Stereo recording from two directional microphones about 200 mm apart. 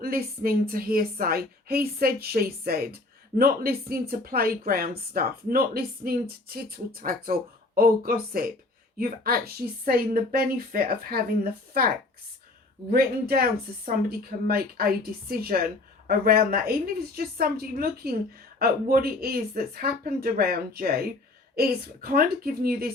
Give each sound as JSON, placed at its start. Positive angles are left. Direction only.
{"t": 0.0, "sound": "a woman's voice", "side_deg": -50}
{"t": 12.9, "sound": "a woman's voice", "side_deg": -50}